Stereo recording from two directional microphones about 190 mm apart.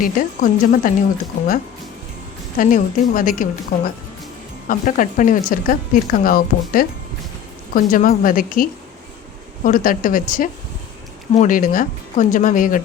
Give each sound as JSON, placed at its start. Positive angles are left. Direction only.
{"t": 0.0, "sound": "speech", "side_deg": 45}
{"t": 2.6, "sound": "speech", "side_deg": 45}
{"t": 9.6, "sound": "speech", "side_deg": 45}